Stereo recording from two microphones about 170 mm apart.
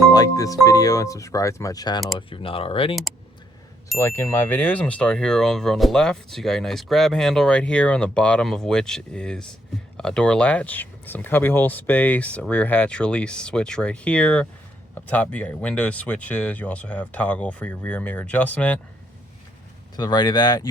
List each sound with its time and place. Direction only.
0.1 s speech: 20° left (ahead or behind)
2.1 s speech: 30° left (ahead or behind)
3.9 s speech: 15° left (ahead or behind)
20.0 s speech: 25° left (ahead or behind)